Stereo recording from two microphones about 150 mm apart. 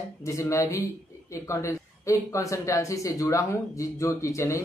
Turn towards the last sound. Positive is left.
turn(degrees=20)  # may be behind; listen again after turning